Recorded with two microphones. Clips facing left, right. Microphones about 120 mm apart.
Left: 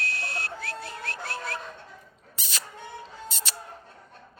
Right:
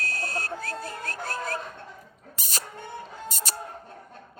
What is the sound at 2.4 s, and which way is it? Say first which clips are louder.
Rodents: right 2 dB; 40° right (ahead or behind).